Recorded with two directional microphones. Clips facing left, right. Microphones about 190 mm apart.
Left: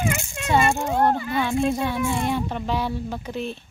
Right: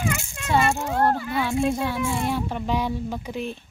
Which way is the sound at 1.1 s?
5° right (ahead or behind).